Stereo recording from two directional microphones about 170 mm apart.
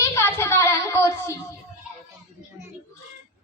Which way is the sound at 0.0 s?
15° left (ahead or behind).